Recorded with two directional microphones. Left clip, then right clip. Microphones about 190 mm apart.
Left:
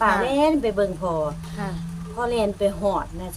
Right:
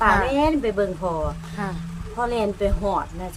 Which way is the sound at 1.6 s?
15° right (ahead or behind).